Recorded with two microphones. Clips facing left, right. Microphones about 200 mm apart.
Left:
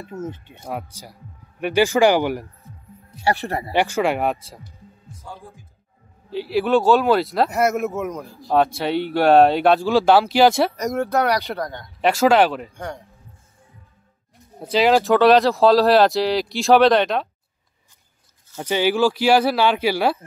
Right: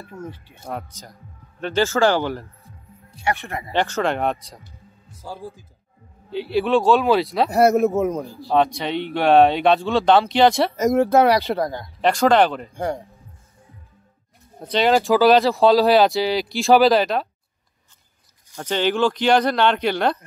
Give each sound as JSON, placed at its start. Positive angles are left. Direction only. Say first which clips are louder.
{"t": 0.0, "sound": "speech", "louder": "left 4 dB", "side_deg": 20}
{"t": 3.3, "sound": "speech", "louder": "left 3 dB", "side_deg": 35}
{"t": 3.7, "sound": "speech", "louder": "left 1 dB", "side_deg": 10}
{"t": 5.2, "sound": "speech", "louder": "right 5 dB", "side_deg": -30}
{"t": 6.3, "sound": "speech", "louder": "left 1 dB", "side_deg": 0}
{"t": 7.5, "sound": "speech", "louder": "right 5 dB", "side_deg": -35}
{"t": 8.5, "sound": "speech", "louder": "left 1 dB", "side_deg": 5}
{"t": 11.0, "sound": "speech", "louder": "right 4 dB", "side_deg": -30}
{"t": 12.0, "sound": "speech", "louder": "even", "side_deg": 5}
{"t": 12.7, "sound": "speech", "louder": "right 7 dB", "side_deg": -30}
{"t": 14.6, "sound": "speech", "louder": "left 1 dB", "side_deg": 0}
{"t": 18.6, "sound": "speech", "louder": "left 1 dB", "side_deg": 10}